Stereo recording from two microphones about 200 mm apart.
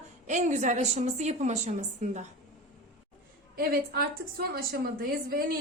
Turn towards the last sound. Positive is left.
turn(degrees=-50)  # may be behind; listen again after turning